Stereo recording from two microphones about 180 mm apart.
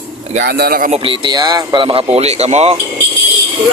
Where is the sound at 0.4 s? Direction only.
60° right (ahead or behind).